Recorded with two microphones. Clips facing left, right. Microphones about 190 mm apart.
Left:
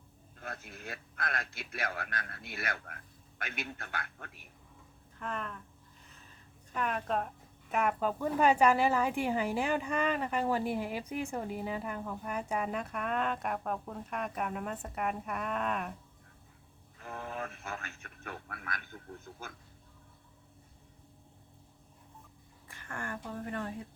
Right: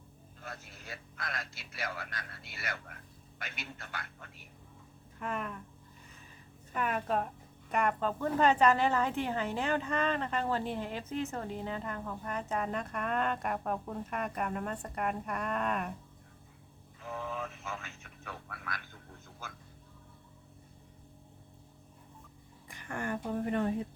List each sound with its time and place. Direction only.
0.4 s a man's voice: 55° left (ahead or behind)
5.2 s speech: 5° right (ahead or behind)
6.7 s a woman's voice: 5° right (ahead or behind)
17.0 s a sound: 55° left (ahead or behind)
22.7 s speech: 15° right (ahead or behind)